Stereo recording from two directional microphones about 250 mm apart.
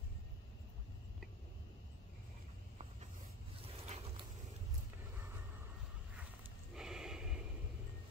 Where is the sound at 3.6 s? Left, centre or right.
Right.